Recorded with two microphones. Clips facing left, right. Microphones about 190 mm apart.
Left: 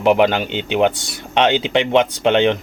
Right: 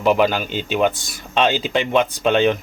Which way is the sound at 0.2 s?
65° left (ahead or behind).